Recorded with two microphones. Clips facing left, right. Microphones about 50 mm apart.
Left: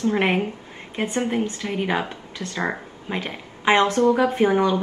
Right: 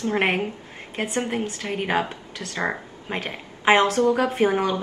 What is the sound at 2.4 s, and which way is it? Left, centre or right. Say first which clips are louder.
Speech: left 4 dB; centre.